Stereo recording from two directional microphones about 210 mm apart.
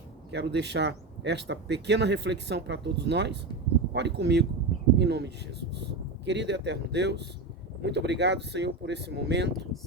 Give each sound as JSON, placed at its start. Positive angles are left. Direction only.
{"t": 0.3, "sound": "speech", "side_deg": -55}